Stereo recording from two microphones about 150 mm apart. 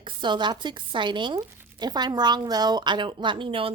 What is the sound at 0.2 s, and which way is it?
Speech, 30° right (ahead or behind).